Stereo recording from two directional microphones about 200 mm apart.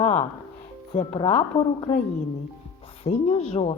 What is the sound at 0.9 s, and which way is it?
Speech, 30° left (ahead or behind).